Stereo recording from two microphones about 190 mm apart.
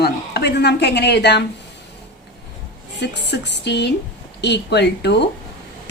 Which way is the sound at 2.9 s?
65° left (ahead or behind).